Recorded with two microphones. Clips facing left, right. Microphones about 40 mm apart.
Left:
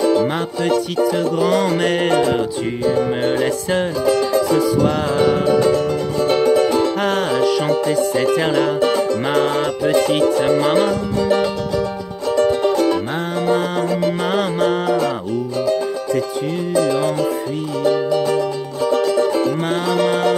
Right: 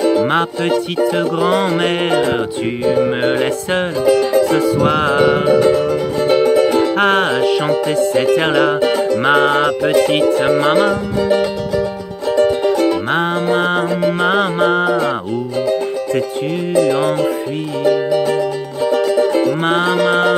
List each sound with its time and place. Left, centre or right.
0.0 s music: centre
1.0 s music: right
4.4 s music: right
5.2 s music: right
7.0 s music: right
11.1 s music: centre
13.5 s music: right
16.9 s music: right
17.8 s music: centre
19.7 s music: right